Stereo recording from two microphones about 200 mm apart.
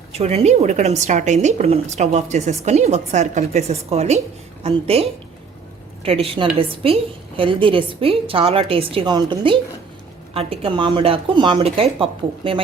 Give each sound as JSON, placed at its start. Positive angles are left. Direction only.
{"t": 0.1, "sound": "a woman's voice", "side_deg": -30}